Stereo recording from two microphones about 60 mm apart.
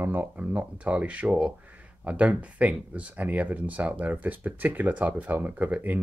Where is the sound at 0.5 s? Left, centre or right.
Right.